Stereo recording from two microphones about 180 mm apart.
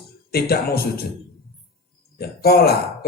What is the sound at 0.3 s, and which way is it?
Speech, 60° left (ahead or behind).